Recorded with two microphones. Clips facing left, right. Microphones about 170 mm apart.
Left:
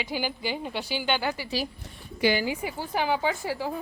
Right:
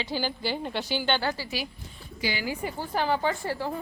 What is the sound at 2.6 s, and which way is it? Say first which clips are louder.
A woman's voice: even; 5° left (ahead or behind).